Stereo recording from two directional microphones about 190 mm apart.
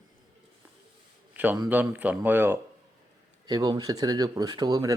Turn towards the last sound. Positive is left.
turn(degrees=-20)  # may be behind; listen again after turning